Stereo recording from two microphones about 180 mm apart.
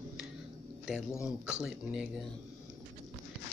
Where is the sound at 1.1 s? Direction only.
15° left (ahead or behind).